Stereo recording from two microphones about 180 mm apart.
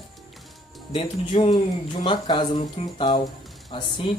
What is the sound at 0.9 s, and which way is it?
Speech, 30° left (ahead or behind).